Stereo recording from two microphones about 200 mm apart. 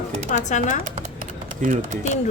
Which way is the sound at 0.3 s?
40° left (ahead or behind).